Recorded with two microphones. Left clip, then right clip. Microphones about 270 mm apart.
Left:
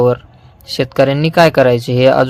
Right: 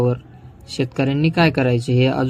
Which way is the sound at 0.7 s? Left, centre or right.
Left.